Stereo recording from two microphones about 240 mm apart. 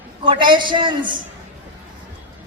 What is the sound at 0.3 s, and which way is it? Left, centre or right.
Speech, centre.